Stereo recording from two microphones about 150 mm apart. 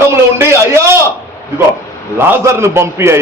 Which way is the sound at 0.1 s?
15° right (ahead or behind).